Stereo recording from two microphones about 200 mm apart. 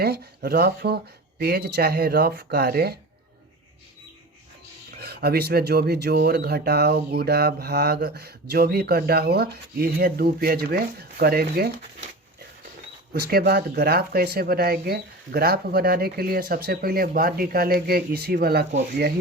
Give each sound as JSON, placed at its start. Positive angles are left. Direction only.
{"t": 0.0, "sound": "speech", "side_deg": -50}
{"t": 4.9, "sound": "speech", "side_deg": -50}
{"t": 13.1, "sound": "speech", "side_deg": -50}